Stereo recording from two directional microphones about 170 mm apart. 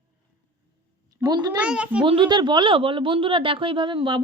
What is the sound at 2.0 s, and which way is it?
Speech, 30° right (ahead or behind).